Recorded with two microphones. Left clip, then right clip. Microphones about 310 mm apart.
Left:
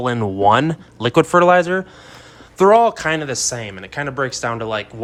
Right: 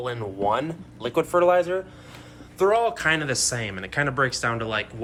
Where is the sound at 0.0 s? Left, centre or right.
Left.